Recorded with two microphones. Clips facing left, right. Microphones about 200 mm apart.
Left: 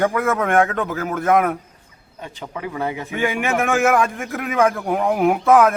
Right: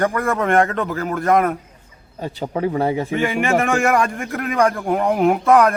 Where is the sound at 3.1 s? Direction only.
Centre (ahead or behind).